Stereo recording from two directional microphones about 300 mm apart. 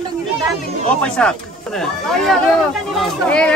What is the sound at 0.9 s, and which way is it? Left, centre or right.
Speech, centre.